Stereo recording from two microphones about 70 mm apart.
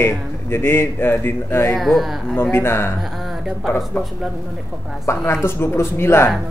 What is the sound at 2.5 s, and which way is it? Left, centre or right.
Speech, left.